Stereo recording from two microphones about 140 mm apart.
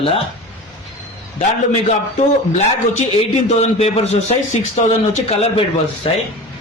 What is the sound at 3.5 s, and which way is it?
A man's voice, 50° left (ahead or behind).